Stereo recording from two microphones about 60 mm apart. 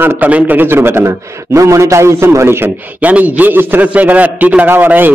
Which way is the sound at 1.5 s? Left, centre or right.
Right.